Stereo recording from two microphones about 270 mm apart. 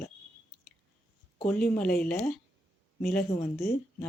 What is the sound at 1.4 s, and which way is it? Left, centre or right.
Speech, centre.